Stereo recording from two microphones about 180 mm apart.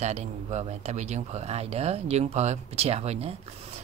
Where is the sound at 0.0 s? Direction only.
40° right (ahead or behind).